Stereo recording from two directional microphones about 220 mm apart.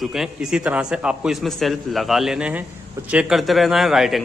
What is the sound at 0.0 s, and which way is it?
A man's voice, centre (ahead or behind).